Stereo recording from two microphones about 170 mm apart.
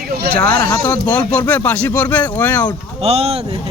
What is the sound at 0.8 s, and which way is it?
Speech, 5° left (ahead or behind).